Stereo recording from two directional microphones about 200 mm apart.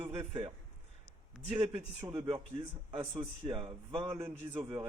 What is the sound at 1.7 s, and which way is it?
Speech, 10° right (ahead or behind).